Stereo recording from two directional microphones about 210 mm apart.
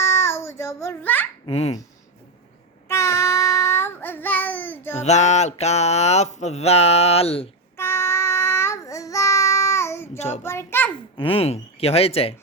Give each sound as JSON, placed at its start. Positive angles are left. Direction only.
{"t": 0.0, "sound": "a sound", "side_deg": 15}
{"t": 1.5, "sound": "speech", "side_deg": 30}
{"t": 2.9, "sound": "child singing", "side_deg": 15}
{"t": 4.9, "sound": "mantra", "side_deg": 35}
{"t": 7.8, "sound": "child singing", "side_deg": 10}
{"t": 10.2, "sound": "mantra", "side_deg": 30}
{"t": 10.4, "sound": "a child's voice", "side_deg": 10}
{"t": 11.2, "sound": "speech", "side_deg": 25}